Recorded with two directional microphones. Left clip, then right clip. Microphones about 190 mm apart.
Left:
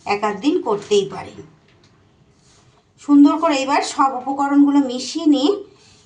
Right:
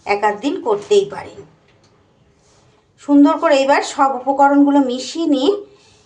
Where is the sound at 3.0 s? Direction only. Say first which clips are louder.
Right 1 dB; 25° right (ahead or behind).